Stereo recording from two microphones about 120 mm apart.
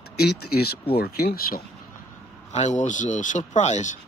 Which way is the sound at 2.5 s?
75° left (ahead or behind).